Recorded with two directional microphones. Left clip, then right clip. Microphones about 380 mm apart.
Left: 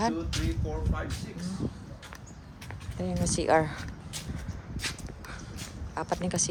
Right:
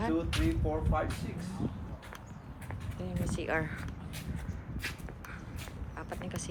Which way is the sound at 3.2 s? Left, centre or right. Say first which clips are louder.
Left 10 dB; centre.